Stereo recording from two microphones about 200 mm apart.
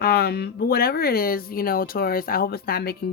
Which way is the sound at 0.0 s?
50° left (ahead or behind).